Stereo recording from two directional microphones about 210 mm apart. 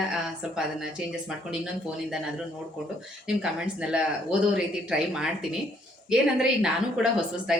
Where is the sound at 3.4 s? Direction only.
5° right (ahead or behind).